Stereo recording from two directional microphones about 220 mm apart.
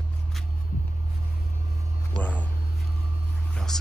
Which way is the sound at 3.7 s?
Centre (ahead or behind).